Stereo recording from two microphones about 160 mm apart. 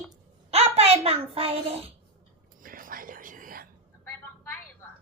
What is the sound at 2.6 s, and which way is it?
Whispering, 60° right (ahead or behind).